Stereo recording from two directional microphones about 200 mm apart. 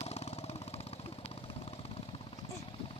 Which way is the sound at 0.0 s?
30° left (ahead or behind).